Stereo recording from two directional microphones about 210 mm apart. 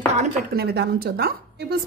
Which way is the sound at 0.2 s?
45° right (ahead or behind).